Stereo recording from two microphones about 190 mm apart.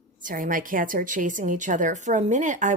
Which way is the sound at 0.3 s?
45° right (ahead or behind).